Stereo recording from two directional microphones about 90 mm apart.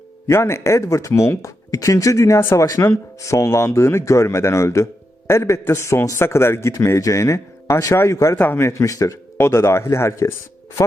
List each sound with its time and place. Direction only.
0.3 s a man's voice: 30° left (ahead or behind)